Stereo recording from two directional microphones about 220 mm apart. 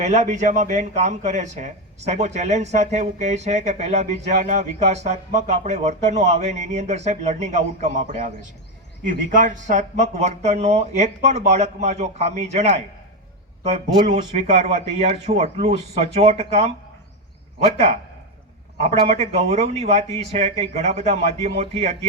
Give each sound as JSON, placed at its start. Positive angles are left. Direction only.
{"t": 0.0, "sound": "a man's voice", "side_deg": -30}
{"t": 9.3, "sound": "a man's voice", "side_deg": -35}
{"t": 19.0, "sound": "speech", "side_deg": -30}